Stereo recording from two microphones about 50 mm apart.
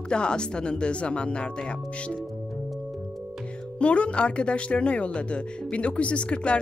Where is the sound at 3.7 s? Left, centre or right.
Left.